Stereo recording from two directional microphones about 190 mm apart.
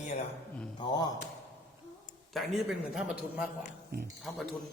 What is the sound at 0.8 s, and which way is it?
Speech, 25° left (ahead or behind).